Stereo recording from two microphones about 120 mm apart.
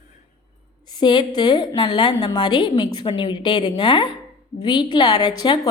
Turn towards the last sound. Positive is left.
turn(degrees=35)  # may be behind; listen again after turning